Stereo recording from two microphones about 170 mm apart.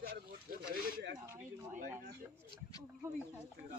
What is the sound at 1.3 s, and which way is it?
Speech, 10° right (ahead or behind).